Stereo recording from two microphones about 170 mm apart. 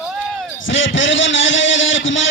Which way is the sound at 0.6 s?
90° left.